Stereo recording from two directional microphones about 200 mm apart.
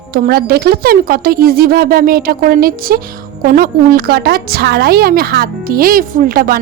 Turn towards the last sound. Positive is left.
turn(degrees=-45)  # may be behind; listen again after turning